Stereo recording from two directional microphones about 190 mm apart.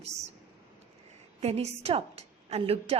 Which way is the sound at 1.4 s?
35° right (ahead or behind).